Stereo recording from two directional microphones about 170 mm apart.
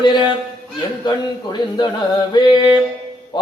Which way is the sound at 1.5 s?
25° left (ahead or behind).